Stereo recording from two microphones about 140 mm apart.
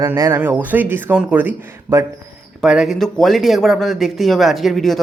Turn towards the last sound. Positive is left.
turn(degrees=0)  # may be behind; listen again after turning